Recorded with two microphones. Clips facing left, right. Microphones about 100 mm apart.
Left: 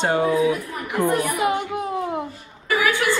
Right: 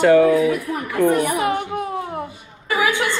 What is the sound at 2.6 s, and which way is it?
Chuckle, 25° right (ahead or behind).